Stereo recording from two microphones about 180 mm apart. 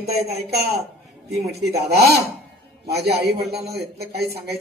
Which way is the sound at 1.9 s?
65° right (ahead or behind).